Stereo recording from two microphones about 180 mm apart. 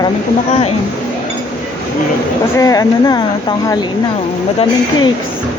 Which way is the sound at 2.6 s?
20° left (ahead or behind).